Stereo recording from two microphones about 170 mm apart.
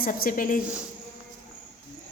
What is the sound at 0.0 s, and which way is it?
Speech, 55° left (ahead or behind).